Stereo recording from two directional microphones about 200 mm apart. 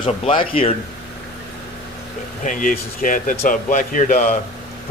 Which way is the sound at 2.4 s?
40° left (ahead or behind).